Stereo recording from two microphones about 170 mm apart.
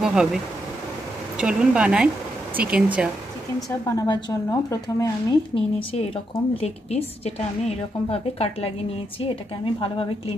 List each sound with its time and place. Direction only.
0.0 s speech: 5° right (ahead or behind)
1.4 s speech: 5° right (ahead or behind)
3.9 s speech: 20° left (ahead or behind)
5.5 s a woman's voice: 30° left (ahead or behind)